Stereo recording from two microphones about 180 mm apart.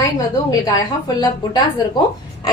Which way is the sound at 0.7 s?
20° left (ahead or behind).